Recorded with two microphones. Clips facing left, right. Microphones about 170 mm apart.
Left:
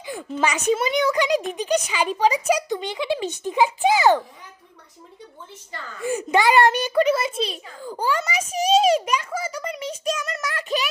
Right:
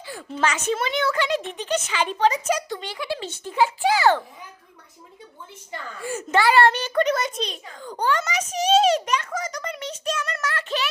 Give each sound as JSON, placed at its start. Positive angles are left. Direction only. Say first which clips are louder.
{"t": 0.0, "sound": "a sound", "louder": "left 4 dB", "side_deg": 15}
{"t": 0.7, "sound": "a child's voice", "louder": "left 3 dB", "side_deg": 10}
{"t": 6.0, "sound": "a child's voice", "louder": "left 2 dB", "side_deg": 15}